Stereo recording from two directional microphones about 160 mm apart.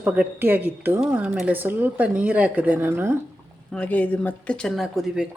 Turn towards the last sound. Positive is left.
turn(degrees=-5)  # may be behind; listen again after turning